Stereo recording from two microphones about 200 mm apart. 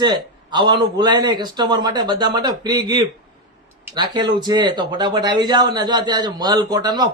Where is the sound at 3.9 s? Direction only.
20° right (ahead or behind).